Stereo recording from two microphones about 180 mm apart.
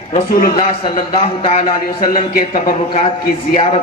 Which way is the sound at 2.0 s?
50° left (ahead or behind).